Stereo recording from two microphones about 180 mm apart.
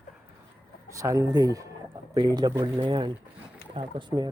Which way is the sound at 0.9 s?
15° right (ahead or behind).